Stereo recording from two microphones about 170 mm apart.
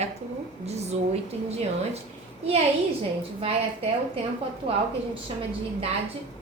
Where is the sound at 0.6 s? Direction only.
40° right (ahead or behind).